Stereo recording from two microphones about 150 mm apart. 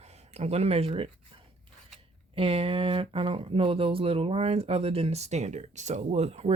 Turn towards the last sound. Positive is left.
turn(degrees=-45)  # may be behind; listen again after turning